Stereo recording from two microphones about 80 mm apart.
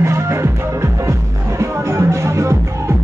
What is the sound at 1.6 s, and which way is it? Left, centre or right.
Music, right.